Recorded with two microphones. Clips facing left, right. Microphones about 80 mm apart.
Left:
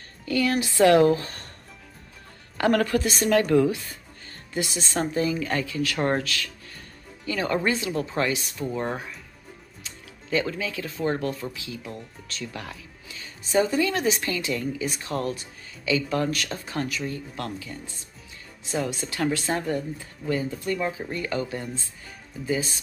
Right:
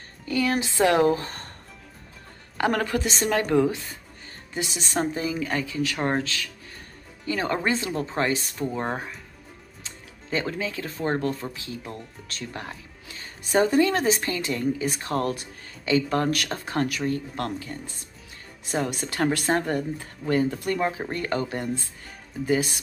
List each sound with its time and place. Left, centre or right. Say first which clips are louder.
0.2 s speech: left 1 dB; centre
2.5 s speech: left 2 dB; centre; by 17.7 s right
18.7 s speech: right 1 dB; right